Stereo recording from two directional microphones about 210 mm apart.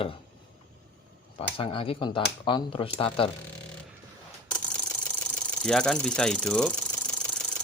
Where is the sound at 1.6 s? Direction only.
25° left (ahead or behind).